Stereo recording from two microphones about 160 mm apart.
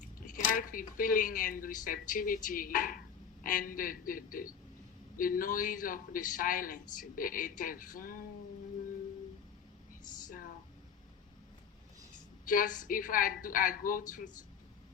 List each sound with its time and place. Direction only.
0.3 s speech: 55° left (ahead or behind)
12.5 s speech: 55° left (ahead or behind)